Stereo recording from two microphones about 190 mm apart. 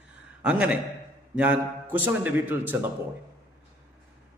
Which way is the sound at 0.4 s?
5° right (ahead or behind).